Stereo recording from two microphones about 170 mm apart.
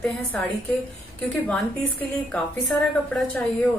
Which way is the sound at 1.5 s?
10° left (ahead or behind).